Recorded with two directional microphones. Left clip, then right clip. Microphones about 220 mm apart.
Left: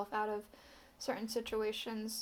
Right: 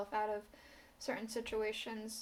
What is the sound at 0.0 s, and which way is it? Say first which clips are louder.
A woman's voice: left 1 dB; 25° left (ahead or behind).